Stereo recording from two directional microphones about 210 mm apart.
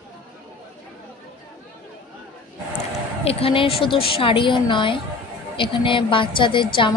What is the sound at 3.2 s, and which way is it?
A woman's voice, 25° left (ahead or behind).